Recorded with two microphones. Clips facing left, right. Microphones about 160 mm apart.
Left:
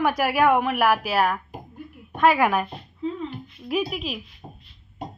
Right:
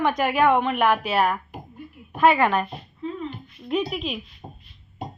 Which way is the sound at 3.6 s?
5° left (ahead or behind).